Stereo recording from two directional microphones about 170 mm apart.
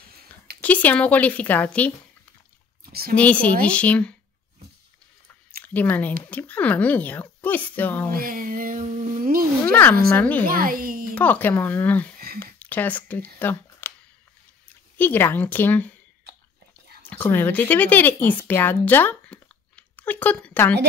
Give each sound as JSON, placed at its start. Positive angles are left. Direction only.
{"t": 0.6, "sound": "a woman's voice", "side_deg": 10}
{"t": 2.9, "sound": "speech", "side_deg": -65}
{"t": 3.2, "sound": "a woman's voice", "side_deg": 10}
{"t": 5.7, "sound": "a woman's voice", "side_deg": 10}
{"t": 8.1, "sound": "a sound", "side_deg": -55}
{"t": 9.7, "sound": "a woman's voice", "side_deg": 10}
{"t": 10.4, "sound": "a child's voice", "side_deg": -55}
{"t": 11.1, "sound": "a woman's voice", "side_deg": 10}
{"t": 15.0, "sound": "a woman's voice", "side_deg": 10}
{"t": 17.0, "sound": "speech", "side_deg": 10}